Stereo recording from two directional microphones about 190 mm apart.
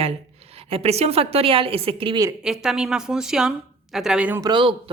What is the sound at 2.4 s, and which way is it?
Speech, 5° right (ahead or behind).